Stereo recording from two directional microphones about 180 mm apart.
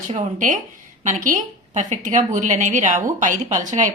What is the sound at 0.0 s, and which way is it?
A woman's voice, 40° right (ahead or behind).